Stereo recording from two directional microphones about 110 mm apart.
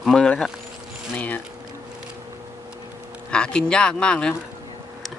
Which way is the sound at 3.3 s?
10° left (ahead or behind).